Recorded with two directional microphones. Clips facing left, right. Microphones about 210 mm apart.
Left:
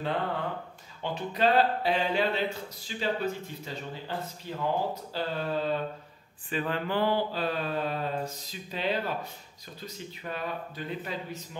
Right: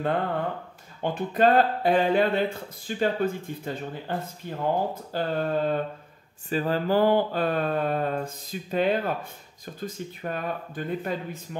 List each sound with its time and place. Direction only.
1.0 s speech: 50° right (ahead or behind)
6.5 s speech: 40° right (ahead or behind)